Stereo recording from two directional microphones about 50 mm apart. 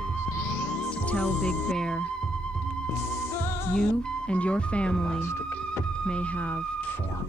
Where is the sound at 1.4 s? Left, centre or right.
Centre.